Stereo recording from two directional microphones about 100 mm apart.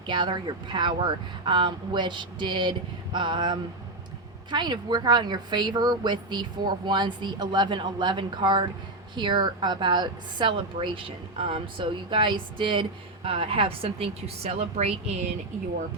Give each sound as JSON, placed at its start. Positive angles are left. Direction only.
{"t": 0.1, "sound": "a woman's voice", "side_deg": -50}
{"t": 10.8, "sound": "a woman's voice", "side_deg": -60}